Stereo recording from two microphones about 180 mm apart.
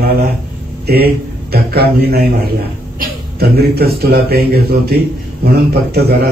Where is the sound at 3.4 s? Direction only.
60° right (ahead or behind).